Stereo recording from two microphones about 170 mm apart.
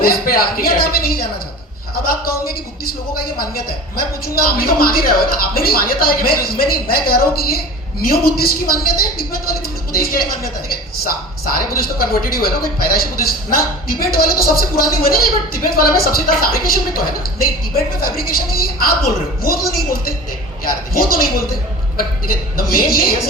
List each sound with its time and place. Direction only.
0.0 s speech: 60° left (ahead or behind)
4.4 s speech: 60° left (ahead or behind)
11.4 s speech: 60° left (ahead or behind)
18.2 s speech: 60° left (ahead or behind)
20.7 s speech: 60° left (ahead or behind)